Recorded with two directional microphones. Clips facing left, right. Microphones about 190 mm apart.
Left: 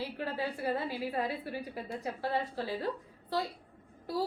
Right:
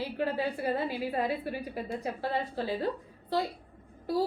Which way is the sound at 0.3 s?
20° right (ahead or behind).